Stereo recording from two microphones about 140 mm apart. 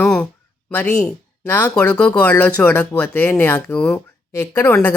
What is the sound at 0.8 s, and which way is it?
Speech, 15° left (ahead or behind).